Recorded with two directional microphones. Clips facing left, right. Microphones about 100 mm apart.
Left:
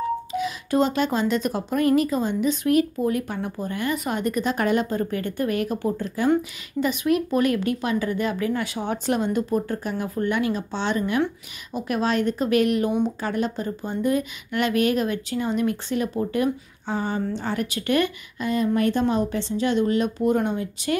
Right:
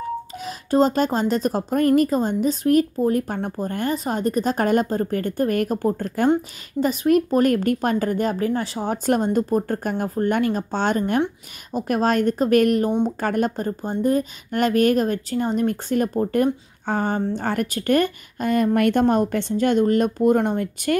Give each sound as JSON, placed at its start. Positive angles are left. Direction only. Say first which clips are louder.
{"t": 0.3, "sound": "speech", "louder": "right 1 dB", "side_deg": -40}
{"t": 6.8, "sound": "speech", "louder": "right 4 dB", "side_deg": -40}